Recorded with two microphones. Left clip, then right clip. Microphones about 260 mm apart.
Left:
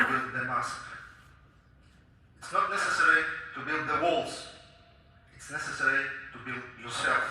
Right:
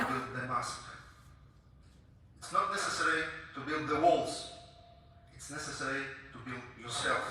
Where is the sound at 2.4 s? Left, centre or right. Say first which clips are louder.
Left 4 dB; right.